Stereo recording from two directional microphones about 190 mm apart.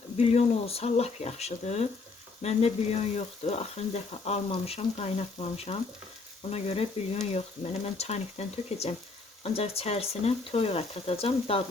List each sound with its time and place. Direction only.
0.2 s speech: 30° left (ahead or behind)